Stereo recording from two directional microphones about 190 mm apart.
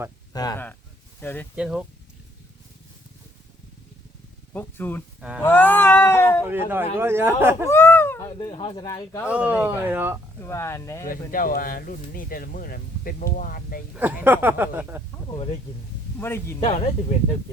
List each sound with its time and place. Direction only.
0.3 s speech: 20° left (ahead or behind)
1.2 s speech: 10° left (ahead or behind)
1.5 s speech: 5° right (ahead or behind)
4.5 s speech: 10° left (ahead or behind)
6.4 s speech: 10° right (ahead or behind)
7.7 s a sound: 10° left (ahead or behind)
8.4 s speech: 25° left (ahead or behind)
9.2 s speech: 5° right (ahead or behind)
10.4 s speech: 15° left (ahead or behind)
11.1 s speech: 45° left (ahead or behind)
13.9 s speech: 10° right (ahead or behind)
15.3 s speech: 30° left (ahead or behind)
16.2 s speech: 10° left (ahead or behind)
16.6 s speech: 30° left (ahead or behind)